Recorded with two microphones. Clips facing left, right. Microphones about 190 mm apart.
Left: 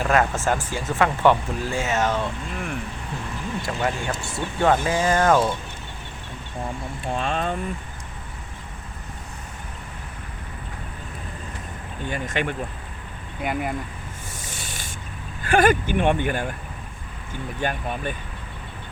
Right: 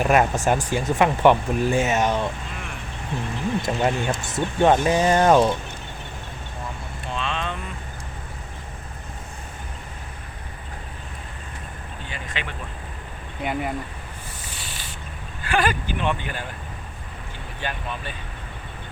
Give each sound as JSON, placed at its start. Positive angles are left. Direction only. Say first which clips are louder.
{"t": 0.0, "sound": "speech", "louder": "right 2 dB", "side_deg": -15}
{"t": 3.6, "sound": "speech", "louder": "right 2 dB", "side_deg": -20}
{"t": 7.1, "sound": "vehicle", "louder": "left 3 dB", "side_deg": 45}
{"t": 12.0, "sound": "speech", "louder": "left 9 dB", "side_deg": 50}
{"t": 13.4, "sound": "speech", "louder": "even", "side_deg": 0}
{"t": 14.4, "sound": "a sound", "louder": "left 1 dB", "side_deg": 45}
{"t": 15.4, "sound": "speech", "louder": "left 5 dB", "side_deg": 45}
{"t": 17.6, "sound": "speech", "louder": "left 4 dB", "side_deg": 50}